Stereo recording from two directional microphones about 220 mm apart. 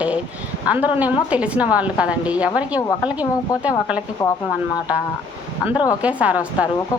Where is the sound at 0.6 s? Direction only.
5° right (ahead or behind).